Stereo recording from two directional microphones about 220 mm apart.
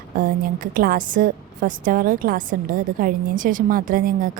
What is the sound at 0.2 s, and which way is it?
A woman's voice, 40° right (ahead or behind).